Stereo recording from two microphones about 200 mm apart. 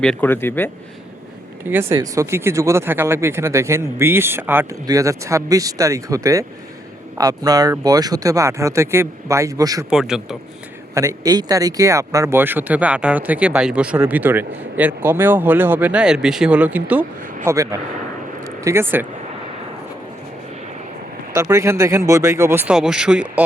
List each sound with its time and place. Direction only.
0.0 s speech: 5° left (ahead or behind)
1.7 s speech: 10° right (ahead or behind)
9.9 s a man's voice: centre (ahead or behind)
10.9 s speech: 15° right (ahead or behind)
21.3 s speech: 15° right (ahead or behind)